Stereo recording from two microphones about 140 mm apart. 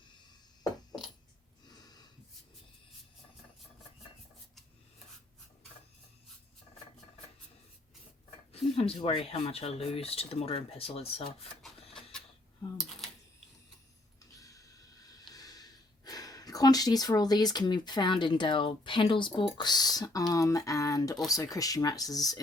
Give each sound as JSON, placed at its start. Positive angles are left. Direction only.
{"t": 8.5, "sound": "speech", "side_deg": 45}
{"t": 11.6, "sound": "printer", "side_deg": 5}
{"t": 14.3, "sound": "a sound", "side_deg": 25}
{"t": 15.3, "sound": "speech", "side_deg": 25}